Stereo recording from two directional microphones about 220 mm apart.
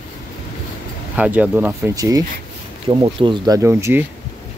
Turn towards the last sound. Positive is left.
turn(degrees=-10)  # may be behind; listen again after turning